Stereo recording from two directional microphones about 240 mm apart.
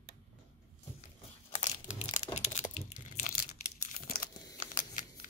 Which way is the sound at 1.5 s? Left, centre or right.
Left.